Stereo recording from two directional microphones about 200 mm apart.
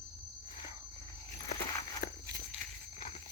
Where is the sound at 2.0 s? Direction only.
55° left (ahead or behind).